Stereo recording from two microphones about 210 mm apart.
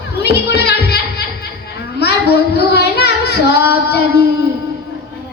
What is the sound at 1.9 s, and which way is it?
Child singing, 50° left (ahead or behind).